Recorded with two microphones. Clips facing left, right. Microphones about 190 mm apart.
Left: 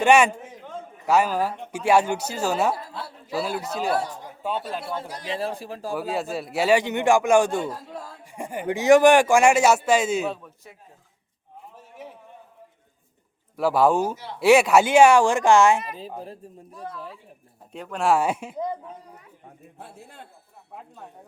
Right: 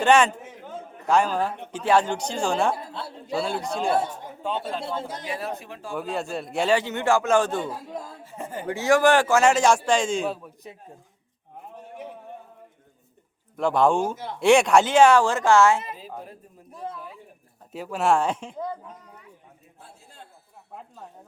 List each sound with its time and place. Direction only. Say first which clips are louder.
0.0 s speech: left 1 dB; 10° left (ahead or behind)
3.8 s a man's voice: right 2 dB; 25° right (ahead or behind)
5.3 s speech: left 6 dB; 30° left (ahead or behind)
5.9 s speech: left 1 dB; centre (ahead or behind)
7.7 s speech: right 1 dB; 15° right (ahead or behind)
8.2 s speech: left 2 dB; 15° left (ahead or behind)
10.6 s a man's voice: right 8 dB; 20° right (ahead or behind)
13.6 s speech: left 1 dB; 5° left (ahead or behind)
16.7 s a man's voice: right 2 dB; 25° right (ahead or behind)
17.7 s speech: even; 5° right (ahead or behind)
19.8 s a man's voice: left 5 dB; 60° left (ahead or behind)